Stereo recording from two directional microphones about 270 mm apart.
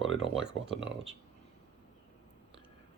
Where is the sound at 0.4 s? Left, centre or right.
Centre.